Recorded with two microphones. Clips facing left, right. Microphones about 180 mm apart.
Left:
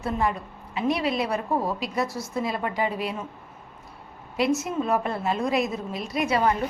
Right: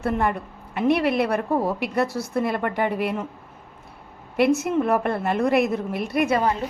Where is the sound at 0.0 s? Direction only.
60° right (ahead or behind).